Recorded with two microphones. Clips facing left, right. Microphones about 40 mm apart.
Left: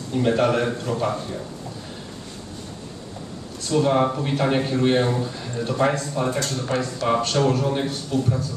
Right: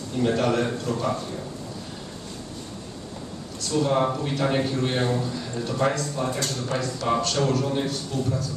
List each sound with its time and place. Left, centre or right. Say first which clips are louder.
0.2 s a man's voice: left 2 dB; centre
3.7 s a man's voice: left 3 dB; centre